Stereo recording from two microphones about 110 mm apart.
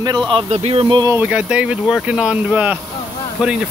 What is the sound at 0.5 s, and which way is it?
Speech, 75° right (ahead or behind).